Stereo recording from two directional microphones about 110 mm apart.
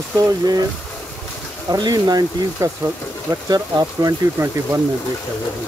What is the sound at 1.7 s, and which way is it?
Speech, 35° right (ahead or behind).